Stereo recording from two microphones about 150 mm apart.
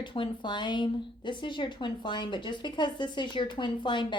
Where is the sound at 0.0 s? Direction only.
30° left (ahead or behind).